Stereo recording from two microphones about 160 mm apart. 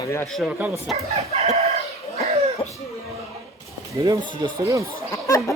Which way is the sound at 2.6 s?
30° left (ahead or behind).